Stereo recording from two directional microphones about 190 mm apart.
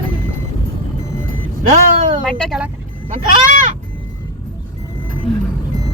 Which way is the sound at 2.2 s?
5° left (ahead or behind).